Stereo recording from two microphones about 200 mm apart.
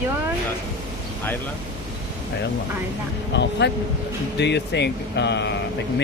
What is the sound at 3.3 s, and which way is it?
Speech, 60° left (ahead or behind).